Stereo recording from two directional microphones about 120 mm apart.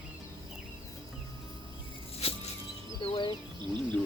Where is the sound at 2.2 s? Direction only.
55° left (ahead or behind).